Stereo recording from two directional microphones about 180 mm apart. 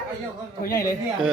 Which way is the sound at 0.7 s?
20° left (ahead or behind).